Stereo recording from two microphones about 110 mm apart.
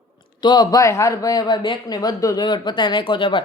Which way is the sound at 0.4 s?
35° left (ahead or behind).